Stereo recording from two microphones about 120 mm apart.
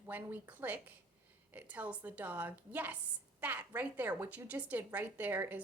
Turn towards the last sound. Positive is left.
turn(degrees=-15)  # may be behind; listen again after turning